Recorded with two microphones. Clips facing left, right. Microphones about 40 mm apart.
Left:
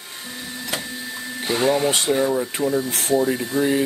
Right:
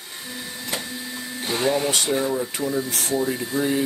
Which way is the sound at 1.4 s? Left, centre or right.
Centre.